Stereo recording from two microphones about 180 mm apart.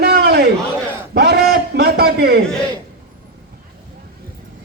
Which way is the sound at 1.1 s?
60° right (ahead or behind).